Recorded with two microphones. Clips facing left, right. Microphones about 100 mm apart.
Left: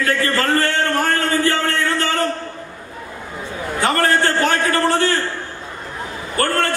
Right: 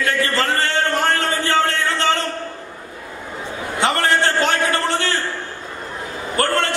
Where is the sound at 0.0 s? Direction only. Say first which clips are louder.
Left 1 dB; 20° right (ahead or behind).